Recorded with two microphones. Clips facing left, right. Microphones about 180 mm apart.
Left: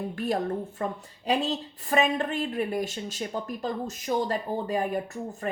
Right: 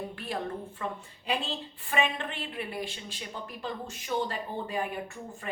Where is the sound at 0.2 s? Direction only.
45° left (ahead or behind).